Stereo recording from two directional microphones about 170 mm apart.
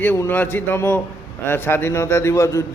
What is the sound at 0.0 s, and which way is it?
A man's voice, 10° left (ahead or behind).